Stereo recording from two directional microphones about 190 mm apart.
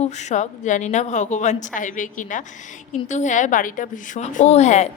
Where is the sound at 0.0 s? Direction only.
35° left (ahead or behind).